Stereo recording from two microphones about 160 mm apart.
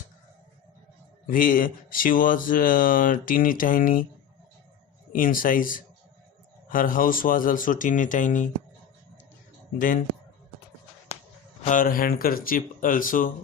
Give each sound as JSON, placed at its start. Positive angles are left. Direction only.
{"t": 1.3, "sound": "speech", "side_deg": 60}
{"t": 5.1, "sound": "speech", "side_deg": 60}
{"t": 9.7, "sound": "speech", "side_deg": 55}
{"t": 11.6, "sound": "speech", "side_deg": 55}